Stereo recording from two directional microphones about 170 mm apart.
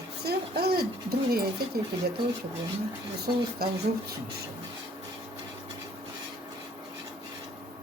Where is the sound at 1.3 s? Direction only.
65° right (ahead or behind).